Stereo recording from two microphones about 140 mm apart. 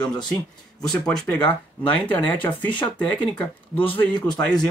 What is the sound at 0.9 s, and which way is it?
Speech, 5° left (ahead or behind).